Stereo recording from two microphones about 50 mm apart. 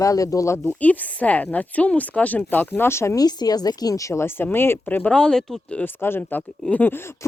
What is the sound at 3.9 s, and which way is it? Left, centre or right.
Speech, left.